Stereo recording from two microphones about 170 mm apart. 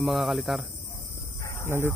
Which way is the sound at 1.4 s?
15° left (ahead or behind).